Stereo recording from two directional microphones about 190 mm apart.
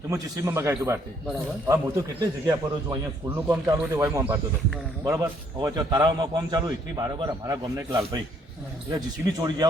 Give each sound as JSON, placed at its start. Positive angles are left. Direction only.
{"t": 0.1, "sound": "a man's voice", "side_deg": -15}